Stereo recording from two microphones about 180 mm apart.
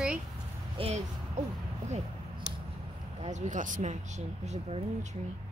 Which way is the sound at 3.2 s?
40° right (ahead or behind).